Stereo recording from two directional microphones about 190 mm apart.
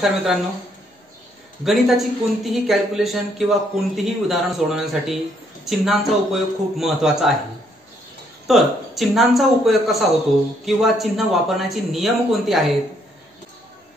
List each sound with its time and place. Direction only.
0.0 s a man's voice: centre (ahead or behind)
1.6 s a man's voice: centre (ahead or behind)
8.5 s a man's voice: centre (ahead or behind)